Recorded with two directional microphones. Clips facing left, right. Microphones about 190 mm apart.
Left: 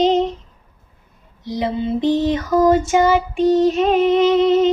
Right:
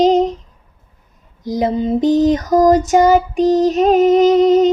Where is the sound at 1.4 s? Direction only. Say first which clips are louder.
Right 4 dB; 45° right (ahead or behind).